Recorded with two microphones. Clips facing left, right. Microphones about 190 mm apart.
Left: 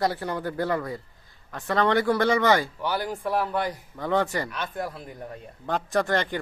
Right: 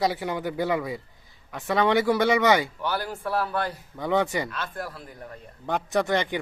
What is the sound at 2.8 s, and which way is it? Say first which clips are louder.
A man's voice: left 1 dB; 15° left (ahead or behind).